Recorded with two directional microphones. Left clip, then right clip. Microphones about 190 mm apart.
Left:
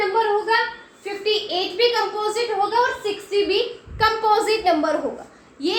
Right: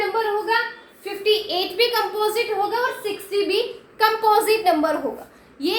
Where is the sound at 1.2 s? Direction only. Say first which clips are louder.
Right 2 dB; 25° right (ahead or behind).